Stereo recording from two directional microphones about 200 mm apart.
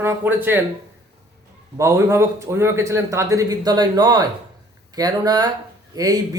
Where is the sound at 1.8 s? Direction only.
15° right (ahead or behind).